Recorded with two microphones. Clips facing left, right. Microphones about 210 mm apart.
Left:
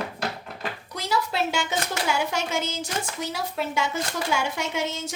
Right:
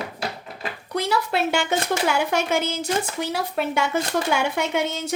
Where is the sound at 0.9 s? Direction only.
60° right (ahead or behind).